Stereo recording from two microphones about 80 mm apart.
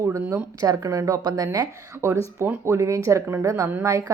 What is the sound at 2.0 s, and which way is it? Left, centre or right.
Speech, right.